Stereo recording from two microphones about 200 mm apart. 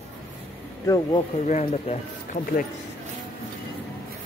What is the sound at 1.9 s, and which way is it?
Speech, 30° left (ahead or behind).